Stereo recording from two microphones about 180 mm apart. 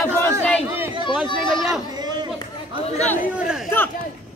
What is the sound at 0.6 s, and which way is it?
Speech, 15° right (ahead or behind).